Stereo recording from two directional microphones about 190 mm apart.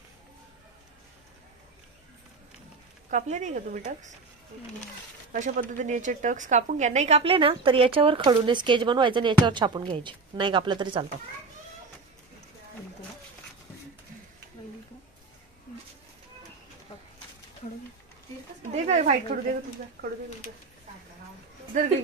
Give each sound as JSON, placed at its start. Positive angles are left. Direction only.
{"t": 3.1, "sound": "speech", "side_deg": -40}
{"t": 5.3, "sound": "a woman's voice", "side_deg": -45}
{"t": 18.8, "sound": "a woman's voice", "side_deg": -35}
{"t": 21.7, "sound": "speech", "side_deg": -40}